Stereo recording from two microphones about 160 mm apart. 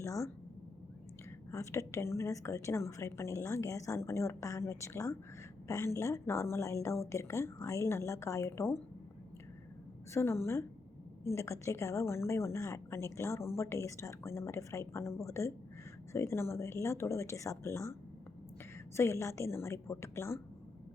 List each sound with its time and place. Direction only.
0.0 s a sound: 20° left (ahead or behind)
1.5 s a woman's voice: 20° left (ahead or behind)
10.1 s a woman's voice: 15° left (ahead or behind)
18.9 s a woman's voice: 15° left (ahead or behind)